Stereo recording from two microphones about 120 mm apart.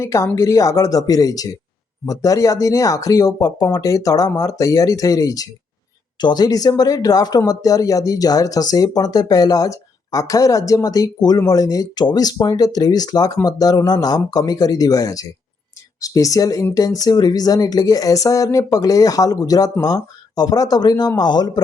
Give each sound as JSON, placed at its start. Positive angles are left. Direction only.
{"t": 0.0, "sound": "speech", "side_deg": 30}